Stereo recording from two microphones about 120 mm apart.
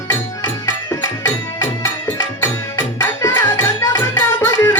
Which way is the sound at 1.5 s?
25° left (ahead or behind).